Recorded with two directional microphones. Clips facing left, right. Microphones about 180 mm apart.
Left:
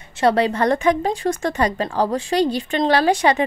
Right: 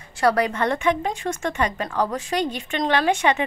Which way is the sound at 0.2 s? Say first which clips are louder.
Left 3 dB; 25° left (ahead or behind).